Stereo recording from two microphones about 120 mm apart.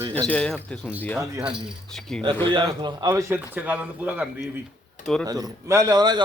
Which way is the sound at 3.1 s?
25° right (ahead or behind).